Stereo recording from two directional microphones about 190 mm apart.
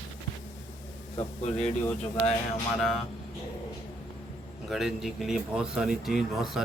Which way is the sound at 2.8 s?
Centre (ahead or behind).